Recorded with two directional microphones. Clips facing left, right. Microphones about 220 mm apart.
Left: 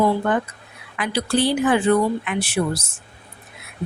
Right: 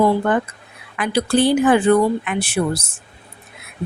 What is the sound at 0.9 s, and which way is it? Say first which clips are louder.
A woman's voice: right 4 dB; 50° right (ahead or behind).